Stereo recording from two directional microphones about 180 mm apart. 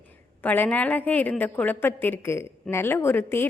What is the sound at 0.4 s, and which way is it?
A woman's voice, 10° left (ahead or behind).